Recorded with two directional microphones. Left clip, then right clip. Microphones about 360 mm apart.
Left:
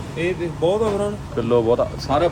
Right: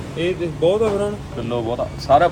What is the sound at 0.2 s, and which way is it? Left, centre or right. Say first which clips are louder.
Speech: right 2 dB; centre.